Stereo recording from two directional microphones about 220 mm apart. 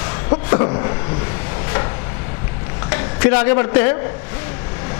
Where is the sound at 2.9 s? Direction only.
15° left (ahead or behind).